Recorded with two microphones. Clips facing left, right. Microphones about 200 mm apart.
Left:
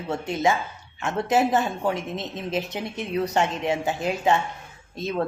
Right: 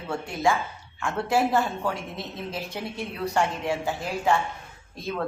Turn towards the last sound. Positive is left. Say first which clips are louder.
# left 4 dB
turn(degrees=20)  # may be behind; listen again after turning